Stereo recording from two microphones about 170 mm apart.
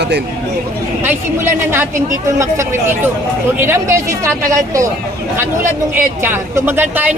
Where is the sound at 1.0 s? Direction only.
15° right (ahead or behind).